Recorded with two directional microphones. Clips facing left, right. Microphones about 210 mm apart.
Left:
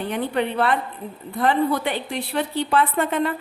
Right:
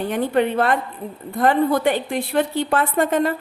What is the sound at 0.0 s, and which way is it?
A woman's voice, 45° right (ahead or behind).